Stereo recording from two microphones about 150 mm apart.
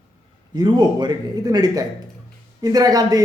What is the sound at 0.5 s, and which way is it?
A man's voice, 30° right (ahead or behind).